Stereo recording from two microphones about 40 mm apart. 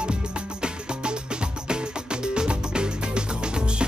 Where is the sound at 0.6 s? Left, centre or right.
Right.